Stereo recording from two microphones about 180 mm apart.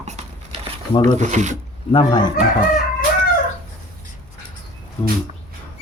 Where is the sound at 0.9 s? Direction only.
25° left (ahead or behind).